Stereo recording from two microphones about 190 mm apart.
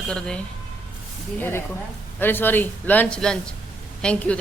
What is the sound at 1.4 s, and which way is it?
A man's voice, 15° left (ahead or behind).